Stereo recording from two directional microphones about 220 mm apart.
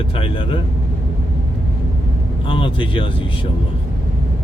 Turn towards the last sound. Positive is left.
turn(degrees=25)  # may be behind; listen again after turning